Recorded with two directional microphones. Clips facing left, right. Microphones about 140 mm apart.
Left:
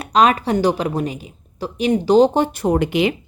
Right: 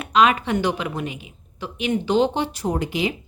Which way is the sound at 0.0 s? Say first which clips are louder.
Left 3 dB; 35° left (ahead or behind).